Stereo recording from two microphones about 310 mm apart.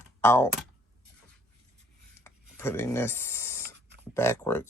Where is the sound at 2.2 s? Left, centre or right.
Centre.